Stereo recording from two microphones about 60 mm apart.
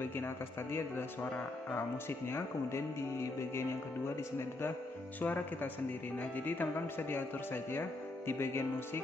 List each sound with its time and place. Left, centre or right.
0.0 s speech: left
4.4 s speech: left
5.2 s speech: left